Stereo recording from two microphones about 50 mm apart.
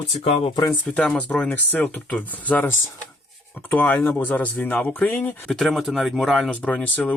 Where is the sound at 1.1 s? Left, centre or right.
Left.